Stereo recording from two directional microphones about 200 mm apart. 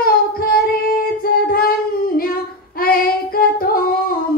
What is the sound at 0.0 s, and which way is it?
Child singing, 45° left (ahead or behind).